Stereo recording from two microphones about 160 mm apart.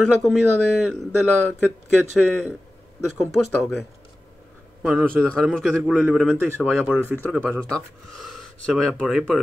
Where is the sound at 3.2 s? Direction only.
Centre (ahead or behind).